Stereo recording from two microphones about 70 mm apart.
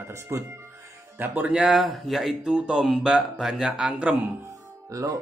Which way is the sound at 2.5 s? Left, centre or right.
Centre.